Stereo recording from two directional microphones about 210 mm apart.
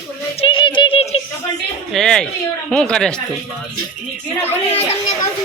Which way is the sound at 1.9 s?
5° left (ahead or behind).